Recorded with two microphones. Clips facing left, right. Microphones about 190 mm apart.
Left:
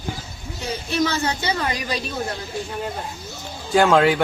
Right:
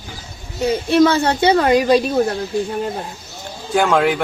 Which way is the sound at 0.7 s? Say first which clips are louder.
Right 9 dB; 55° right (ahead or behind).